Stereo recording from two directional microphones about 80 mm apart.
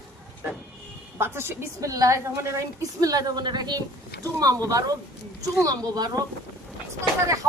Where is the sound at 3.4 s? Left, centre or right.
Right.